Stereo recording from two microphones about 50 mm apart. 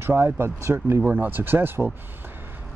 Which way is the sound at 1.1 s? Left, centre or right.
Right.